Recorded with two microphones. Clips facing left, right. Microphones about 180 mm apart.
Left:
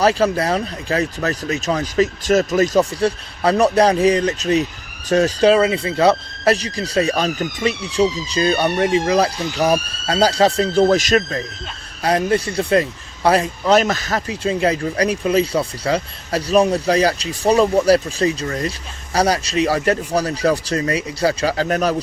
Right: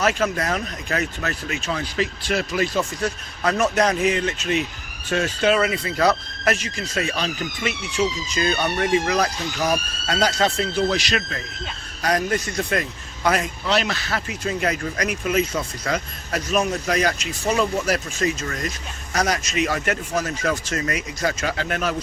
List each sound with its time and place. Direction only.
0.0 s speech: 35° left (ahead or behind)
10.8 s speech: 45° left (ahead or behind)
12.0 s speech: 30° left (ahead or behind)
13.7 s speech: 45° left (ahead or behind)
14.3 s speech: 30° left (ahead or behind)